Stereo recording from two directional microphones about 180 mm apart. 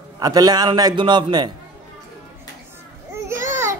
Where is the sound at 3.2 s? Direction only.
15° right (ahead or behind).